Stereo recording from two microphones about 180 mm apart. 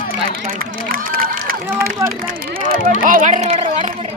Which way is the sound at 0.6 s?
50° right (ahead or behind).